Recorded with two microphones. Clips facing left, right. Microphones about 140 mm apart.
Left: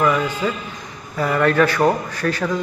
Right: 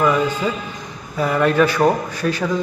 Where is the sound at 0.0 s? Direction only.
15° right (ahead or behind).